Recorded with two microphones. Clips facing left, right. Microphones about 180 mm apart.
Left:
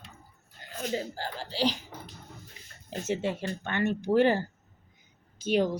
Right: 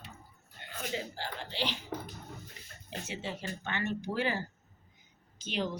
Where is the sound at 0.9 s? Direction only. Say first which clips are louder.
Left 5 dB; 35° left (ahead or behind).